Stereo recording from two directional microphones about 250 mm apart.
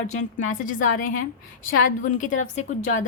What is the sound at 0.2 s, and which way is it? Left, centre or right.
A woman's voice, left.